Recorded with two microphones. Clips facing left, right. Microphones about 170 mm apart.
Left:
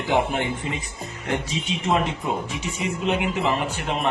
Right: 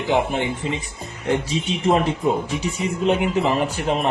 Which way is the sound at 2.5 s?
35° right (ahead or behind).